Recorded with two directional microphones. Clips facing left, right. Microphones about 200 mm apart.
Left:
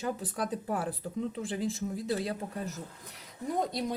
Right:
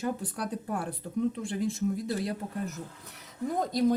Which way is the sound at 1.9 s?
25° left (ahead or behind).